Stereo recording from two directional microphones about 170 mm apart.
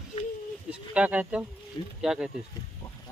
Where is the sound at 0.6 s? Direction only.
5° right (ahead or behind).